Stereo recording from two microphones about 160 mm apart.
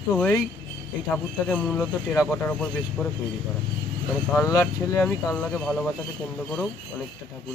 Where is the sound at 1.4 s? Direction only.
5° left (ahead or behind).